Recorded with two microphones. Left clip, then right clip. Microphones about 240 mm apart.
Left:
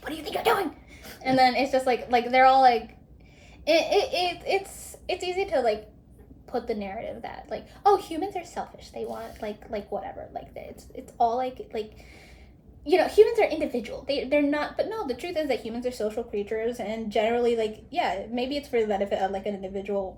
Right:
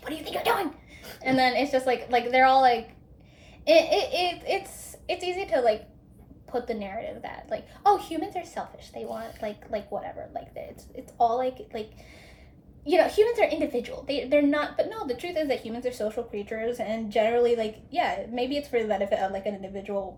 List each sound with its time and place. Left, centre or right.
0.0 s a sound: centre
1.2 s a woman's voice: centre
12.8 s a woman's voice: centre